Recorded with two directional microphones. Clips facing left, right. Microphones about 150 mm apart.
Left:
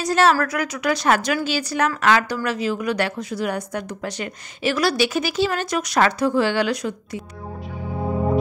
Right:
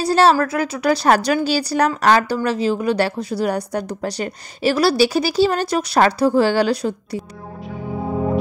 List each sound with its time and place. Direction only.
0.0 s a woman's voice: 30° right (ahead or behind)